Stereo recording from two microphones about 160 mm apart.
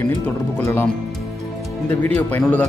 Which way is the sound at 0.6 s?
15° left (ahead or behind).